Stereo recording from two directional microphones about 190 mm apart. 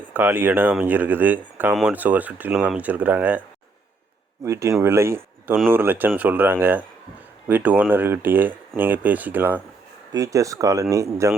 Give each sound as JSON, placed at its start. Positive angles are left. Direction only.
{"t": 0.1, "sound": "speech", "side_deg": -10}
{"t": 4.4, "sound": "speech", "side_deg": -15}